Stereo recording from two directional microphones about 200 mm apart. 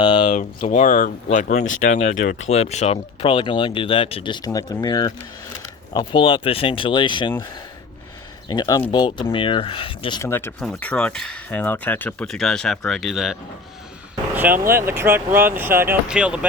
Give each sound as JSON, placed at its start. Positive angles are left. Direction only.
{"t": 0.0, "sound": "speech", "side_deg": 25}
{"t": 0.7, "sound": "speech", "side_deg": 40}
{"t": 8.4, "sound": "speech", "side_deg": 20}
{"t": 10.2, "sound": "speech", "side_deg": 10}
{"t": 14.3, "sound": "speech", "side_deg": -10}